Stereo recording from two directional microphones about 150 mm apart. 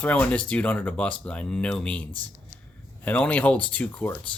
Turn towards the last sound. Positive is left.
turn(degrees=10)  # may be behind; listen again after turning